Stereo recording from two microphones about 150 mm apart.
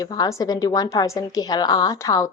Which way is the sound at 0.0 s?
25° left (ahead or behind).